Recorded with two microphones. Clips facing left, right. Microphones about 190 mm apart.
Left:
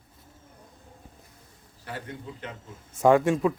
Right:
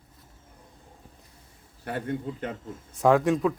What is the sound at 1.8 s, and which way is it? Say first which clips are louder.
Speech: right 7 dB; 55° right (ahead or behind).